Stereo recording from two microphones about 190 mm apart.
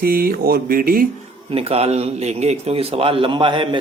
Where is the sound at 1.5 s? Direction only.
30° right (ahead or behind).